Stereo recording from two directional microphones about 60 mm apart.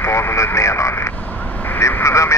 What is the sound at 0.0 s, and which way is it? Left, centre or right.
Vehicle, left.